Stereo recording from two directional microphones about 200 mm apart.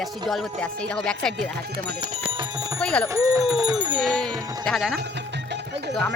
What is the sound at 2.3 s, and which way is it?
Music, 20° right (ahead or behind).